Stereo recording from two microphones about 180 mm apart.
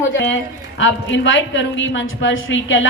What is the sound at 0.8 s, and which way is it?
A woman's voice, 90° left.